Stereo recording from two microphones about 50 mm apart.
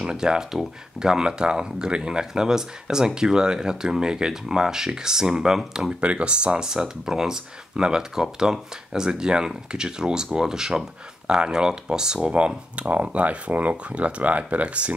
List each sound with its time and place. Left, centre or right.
0.0 s speech: centre
6.0 s speech: right
12.4 s speech: right